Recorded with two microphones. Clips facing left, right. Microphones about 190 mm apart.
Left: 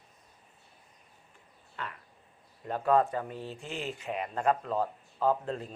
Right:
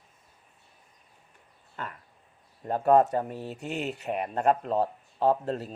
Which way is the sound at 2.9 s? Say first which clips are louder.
Right 5 dB; 40° right (ahead or behind).